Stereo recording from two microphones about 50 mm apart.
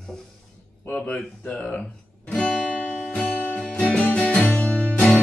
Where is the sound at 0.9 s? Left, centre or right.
Centre.